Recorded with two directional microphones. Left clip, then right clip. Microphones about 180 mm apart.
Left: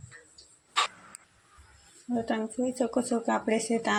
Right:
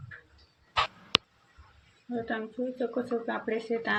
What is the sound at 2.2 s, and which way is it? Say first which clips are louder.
Speech: left 3 dB; 30° left (ahead or behind).